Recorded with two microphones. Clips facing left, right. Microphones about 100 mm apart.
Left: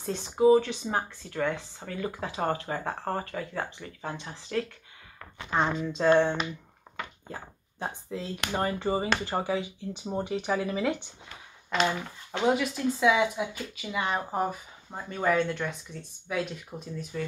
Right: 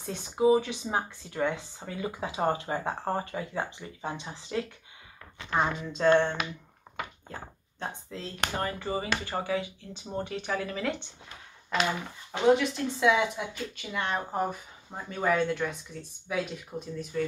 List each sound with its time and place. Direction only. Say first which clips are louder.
0.0 s speech: left 2 dB; 5° right (ahead or behind)
5.6 s speech: left 1 dB; 5° right (ahead or behind); by 8.3 s 10° left (ahead or behind)
8.5 s speech: left 6 dB; 25° left (ahead or behind)
9.2 s speech: left 2 dB; 15° left (ahead or behind)
11.7 s speech: left 2 dB; centre (ahead or behind)